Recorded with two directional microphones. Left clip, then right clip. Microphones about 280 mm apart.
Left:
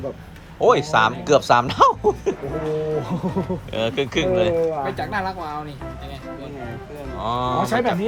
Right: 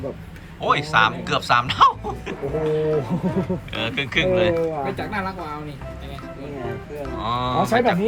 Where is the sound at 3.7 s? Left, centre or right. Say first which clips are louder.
Left 2 dB; centre.